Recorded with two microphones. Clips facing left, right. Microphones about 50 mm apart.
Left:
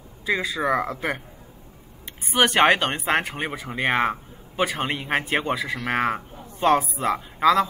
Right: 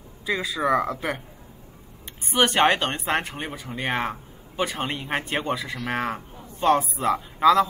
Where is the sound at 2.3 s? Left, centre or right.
Centre.